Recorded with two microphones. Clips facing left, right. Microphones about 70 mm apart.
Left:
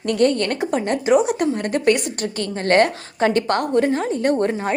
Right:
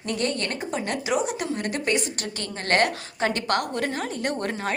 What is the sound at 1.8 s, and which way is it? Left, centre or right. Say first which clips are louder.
Speech: left 8 dB; left.